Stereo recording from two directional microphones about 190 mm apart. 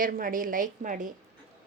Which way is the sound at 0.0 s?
45° right (ahead or behind).